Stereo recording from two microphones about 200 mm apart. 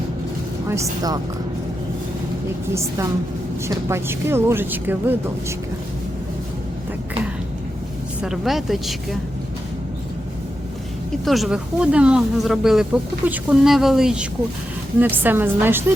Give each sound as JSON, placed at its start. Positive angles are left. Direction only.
{"t": 0.7, "sound": "speech", "side_deg": -15}
{"t": 3.7, "sound": "speech", "side_deg": -15}
{"t": 8.2, "sound": "speech", "side_deg": 0}
{"t": 11.3, "sound": "speech", "side_deg": 0}